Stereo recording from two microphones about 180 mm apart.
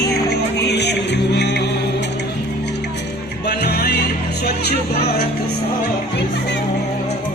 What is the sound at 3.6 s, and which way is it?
Music, 65° left (ahead or behind).